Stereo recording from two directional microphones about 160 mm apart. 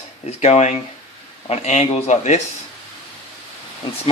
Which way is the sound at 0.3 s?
40° left (ahead or behind).